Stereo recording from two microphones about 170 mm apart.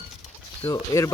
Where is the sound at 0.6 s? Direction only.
20° left (ahead or behind).